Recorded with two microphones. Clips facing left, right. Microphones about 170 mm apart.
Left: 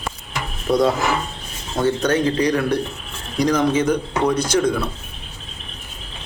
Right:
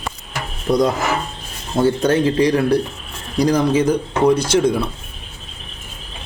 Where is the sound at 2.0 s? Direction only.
30° right (ahead or behind).